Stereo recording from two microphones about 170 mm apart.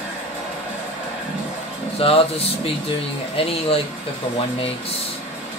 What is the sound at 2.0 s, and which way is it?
Speech, 35° left (ahead or behind).